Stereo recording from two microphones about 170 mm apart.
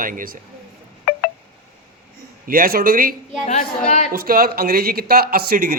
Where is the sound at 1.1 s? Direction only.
55° left (ahead or behind).